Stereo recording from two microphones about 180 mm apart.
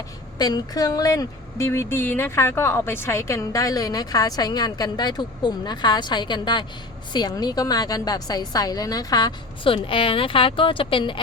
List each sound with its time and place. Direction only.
0.3 s speech: 20° left (ahead or behind)